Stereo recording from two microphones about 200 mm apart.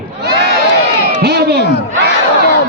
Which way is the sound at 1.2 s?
55° right (ahead or behind).